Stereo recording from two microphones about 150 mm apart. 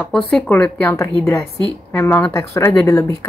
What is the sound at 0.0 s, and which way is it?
Speech, 10° left (ahead or behind).